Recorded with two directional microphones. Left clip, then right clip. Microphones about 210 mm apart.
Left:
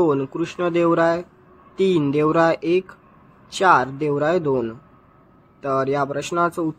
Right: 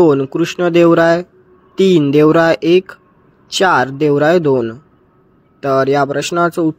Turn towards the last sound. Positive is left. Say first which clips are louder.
# right 7 dB
turn(degrees=-25)  # may be behind; listen again after turning